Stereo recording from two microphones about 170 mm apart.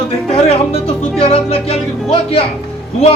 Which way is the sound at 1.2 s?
35° left (ahead or behind).